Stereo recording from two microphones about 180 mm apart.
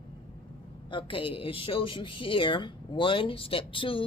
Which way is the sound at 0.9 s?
30° left (ahead or behind).